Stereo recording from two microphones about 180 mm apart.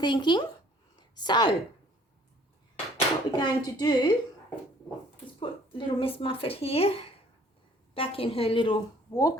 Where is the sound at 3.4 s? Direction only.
25° left (ahead or behind).